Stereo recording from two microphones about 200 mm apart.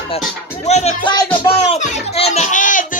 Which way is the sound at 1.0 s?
20° left (ahead or behind).